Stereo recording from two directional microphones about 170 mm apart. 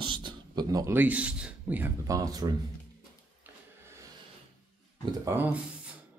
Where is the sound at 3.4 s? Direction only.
15° right (ahead or behind).